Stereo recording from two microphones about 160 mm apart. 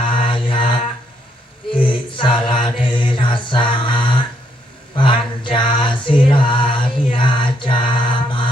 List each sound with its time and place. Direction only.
0.0 s mantra: 30° left (ahead or behind)
1.7 s a sound: 35° left (ahead or behind)
2.8 s mantra: 30° left (ahead or behind)
4.9 s music: 30° left (ahead or behind)